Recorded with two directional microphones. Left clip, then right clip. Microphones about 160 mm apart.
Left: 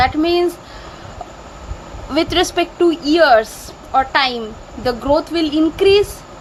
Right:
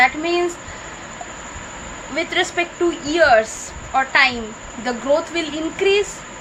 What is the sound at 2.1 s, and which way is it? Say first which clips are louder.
A woman's voice: left 4 dB; 65° left (ahead or behind).